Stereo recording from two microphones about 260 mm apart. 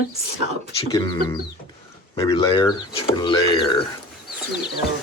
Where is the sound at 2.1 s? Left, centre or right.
Centre.